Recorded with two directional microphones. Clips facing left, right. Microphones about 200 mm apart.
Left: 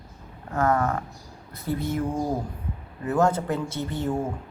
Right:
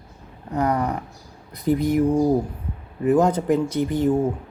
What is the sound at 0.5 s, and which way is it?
Speech, 15° right (ahead or behind).